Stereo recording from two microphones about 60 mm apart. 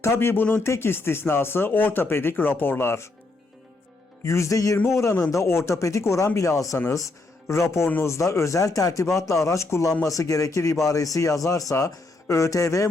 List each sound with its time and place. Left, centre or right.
0.0 s speech: left
4.2 s speech: left
4.9 s speech: left
7.4 s a man's voice: left
10.0 s speech: left